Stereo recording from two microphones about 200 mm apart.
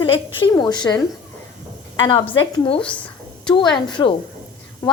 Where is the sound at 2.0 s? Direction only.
25° left (ahead or behind).